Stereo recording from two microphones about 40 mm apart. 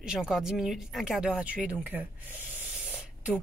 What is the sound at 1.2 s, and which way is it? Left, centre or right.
Speech, right.